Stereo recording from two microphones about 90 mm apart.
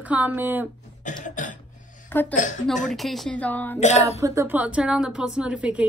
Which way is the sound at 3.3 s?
20° left (ahead or behind).